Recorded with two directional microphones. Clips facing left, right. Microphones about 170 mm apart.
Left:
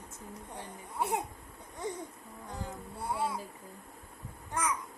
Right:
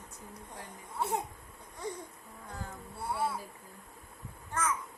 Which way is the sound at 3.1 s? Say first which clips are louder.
Even; 15° left (ahead or behind).